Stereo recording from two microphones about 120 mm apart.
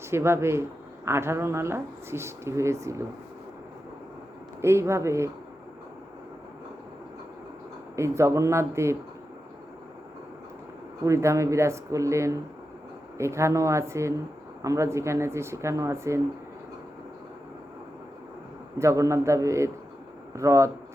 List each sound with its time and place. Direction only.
0.1 s speech: 20° right (ahead or behind)
4.6 s speech: 25° right (ahead or behind)
7.9 s speech: 25° right (ahead or behind)
11.0 s speech: 25° right (ahead or behind)
18.8 s speech: 25° right (ahead or behind)